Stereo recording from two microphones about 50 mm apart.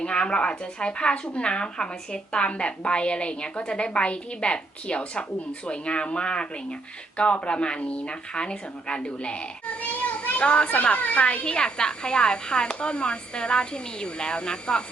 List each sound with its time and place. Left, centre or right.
0.0 s speech: left
9.9 s a sound: left
10.4 s speech: left